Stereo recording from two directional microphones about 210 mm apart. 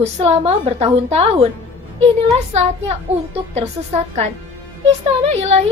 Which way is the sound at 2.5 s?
30° right (ahead or behind).